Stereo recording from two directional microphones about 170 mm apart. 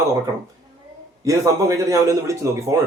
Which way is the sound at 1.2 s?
20° right (ahead or behind).